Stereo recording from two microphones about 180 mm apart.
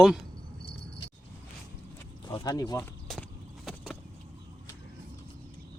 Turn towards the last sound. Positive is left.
turn(degrees=0)  # may be behind; listen again after turning